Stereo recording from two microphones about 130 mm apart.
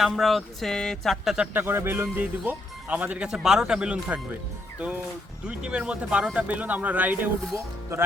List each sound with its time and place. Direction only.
0.0 s speech: centre (ahead or behind)
1.5 s speech: 15° right (ahead or behind)
5.5 s speech: 10° right (ahead or behind)